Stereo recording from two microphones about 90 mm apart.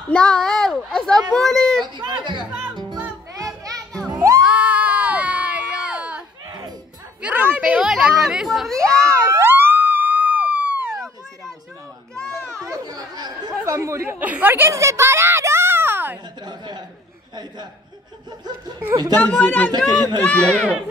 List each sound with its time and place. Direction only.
0.1 s a child's voice: 10° left (ahead or behind)
2.0 s a child's voice: 55° right (ahead or behind)
3.3 s children playing: 40° right (ahead or behind)
4.1 s children shouting: 35° right (ahead or behind)
4.5 s a sound: 15° right (ahead or behind)
7.6 s speech: 10° right (ahead or behind); by 9.1 s 10° left (ahead or behind)
9.3 s police car: 25° right (ahead or behind)
12.4 s children playing: 20° left (ahead or behind)
12.6 s chatter: 45° right (ahead or behind)
13.7 s chatter: 35° right (ahead or behind)
14.0 s a sound: 20° right (ahead or behind)
16.4 s chuckle: 50° right (ahead or behind)
19.1 s speech: 20° left (ahead or behind)